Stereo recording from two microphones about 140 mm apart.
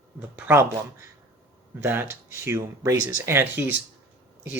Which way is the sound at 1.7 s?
15° right (ahead or behind).